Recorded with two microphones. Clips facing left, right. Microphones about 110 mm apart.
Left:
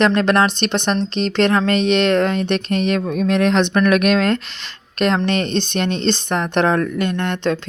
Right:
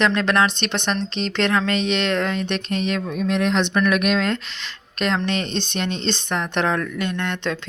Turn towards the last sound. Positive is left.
turn(degrees=45)  # may be behind; listen again after turning